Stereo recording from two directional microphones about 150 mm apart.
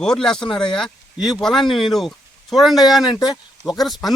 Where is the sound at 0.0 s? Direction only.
5° left (ahead or behind).